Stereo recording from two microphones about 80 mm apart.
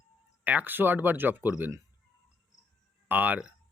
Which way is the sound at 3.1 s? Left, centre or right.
Right.